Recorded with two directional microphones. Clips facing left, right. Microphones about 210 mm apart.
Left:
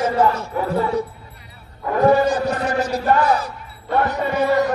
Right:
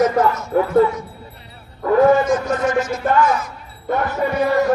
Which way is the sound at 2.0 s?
35° left (ahead or behind).